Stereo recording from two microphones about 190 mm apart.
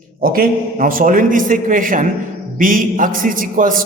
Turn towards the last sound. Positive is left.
turn(degrees=-45)  # may be behind; listen again after turning